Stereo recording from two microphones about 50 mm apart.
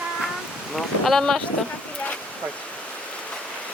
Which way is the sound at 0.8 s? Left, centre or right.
Centre.